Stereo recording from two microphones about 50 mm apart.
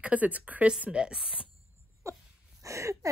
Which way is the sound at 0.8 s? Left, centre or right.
Centre.